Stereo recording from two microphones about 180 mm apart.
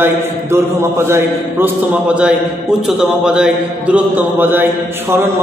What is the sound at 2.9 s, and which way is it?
A man's voice, 5° right (ahead or behind).